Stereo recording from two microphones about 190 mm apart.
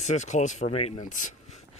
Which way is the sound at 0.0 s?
40° left (ahead or behind).